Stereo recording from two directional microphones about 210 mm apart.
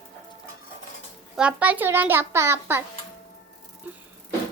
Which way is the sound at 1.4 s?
5° right (ahead or behind).